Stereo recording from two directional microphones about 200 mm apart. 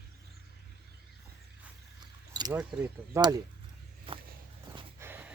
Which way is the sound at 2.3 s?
20° right (ahead or behind).